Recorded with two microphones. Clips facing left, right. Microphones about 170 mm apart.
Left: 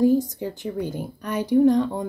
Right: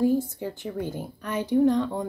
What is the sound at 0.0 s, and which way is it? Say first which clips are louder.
A woman's voice: left 4 dB; 15° left (ahead or behind).